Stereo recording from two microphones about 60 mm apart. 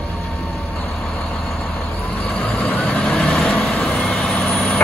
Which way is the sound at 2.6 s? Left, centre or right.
Centre.